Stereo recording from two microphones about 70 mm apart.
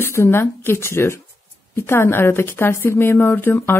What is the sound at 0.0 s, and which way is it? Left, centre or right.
A woman's voice, left.